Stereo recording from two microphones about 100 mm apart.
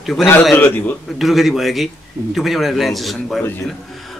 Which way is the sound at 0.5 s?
20° left (ahead or behind).